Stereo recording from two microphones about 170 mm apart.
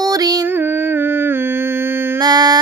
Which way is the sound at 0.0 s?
20° right (ahead or behind).